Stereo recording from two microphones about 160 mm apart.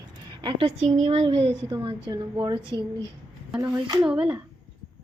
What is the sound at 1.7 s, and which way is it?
Speech, 25° right (ahead or behind).